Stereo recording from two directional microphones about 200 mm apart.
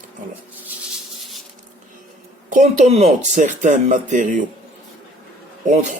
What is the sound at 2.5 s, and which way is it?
Speech, 40° right (ahead or behind).